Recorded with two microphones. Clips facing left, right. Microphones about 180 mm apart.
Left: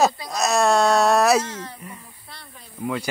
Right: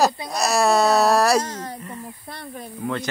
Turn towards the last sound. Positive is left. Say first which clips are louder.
# even
turn(degrees=5)  # may be behind; listen again after turning